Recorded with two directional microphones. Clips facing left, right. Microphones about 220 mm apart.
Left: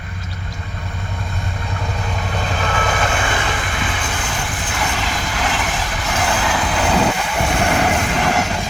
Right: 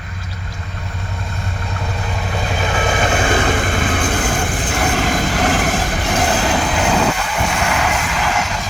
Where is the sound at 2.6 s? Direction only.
25° right (ahead or behind).